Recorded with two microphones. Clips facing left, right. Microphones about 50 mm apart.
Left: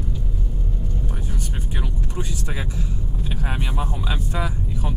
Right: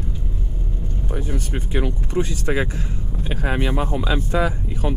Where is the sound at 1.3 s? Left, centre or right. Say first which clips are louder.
Right 6 dB; right.